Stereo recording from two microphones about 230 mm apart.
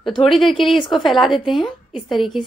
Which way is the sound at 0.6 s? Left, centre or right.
Left.